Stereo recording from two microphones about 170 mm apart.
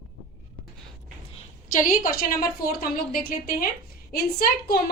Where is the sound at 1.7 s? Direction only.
50° left (ahead or behind).